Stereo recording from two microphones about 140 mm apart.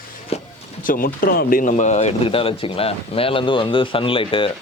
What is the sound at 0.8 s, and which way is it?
Speech, 85° left.